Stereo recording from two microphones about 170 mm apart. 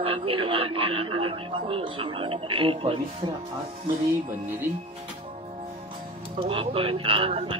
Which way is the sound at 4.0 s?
15° right (ahead or behind).